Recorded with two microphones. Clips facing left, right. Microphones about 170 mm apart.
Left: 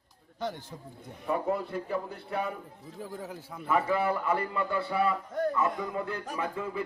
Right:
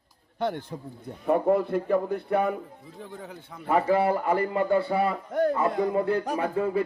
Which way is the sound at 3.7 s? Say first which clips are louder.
Right 5 dB; 35° right (ahead or behind).